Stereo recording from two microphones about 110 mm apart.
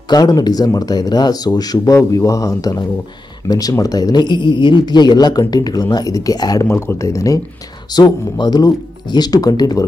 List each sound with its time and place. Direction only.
0.1 s speech: 35° left (ahead or behind)
7.9 s speech: 40° left (ahead or behind)